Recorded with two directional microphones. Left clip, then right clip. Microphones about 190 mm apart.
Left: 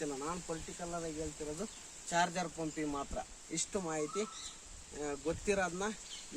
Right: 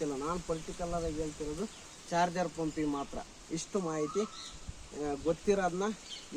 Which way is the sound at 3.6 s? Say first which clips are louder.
Right 3 dB; 10° left (ahead or behind).